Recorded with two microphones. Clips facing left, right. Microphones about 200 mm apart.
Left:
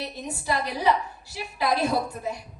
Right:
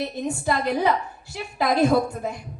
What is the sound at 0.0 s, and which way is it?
A woman's voice, 50° right (ahead or behind).